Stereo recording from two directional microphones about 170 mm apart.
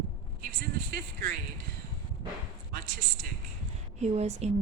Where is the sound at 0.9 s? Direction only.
65° right (ahead or behind).